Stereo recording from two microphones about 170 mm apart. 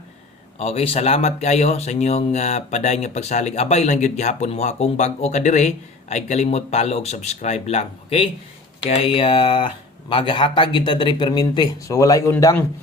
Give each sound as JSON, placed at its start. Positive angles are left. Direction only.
{"t": 0.6, "sound": "speech", "side_deg": 35}